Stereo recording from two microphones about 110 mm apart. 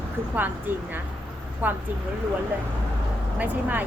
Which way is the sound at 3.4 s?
15° right (ahead or behind).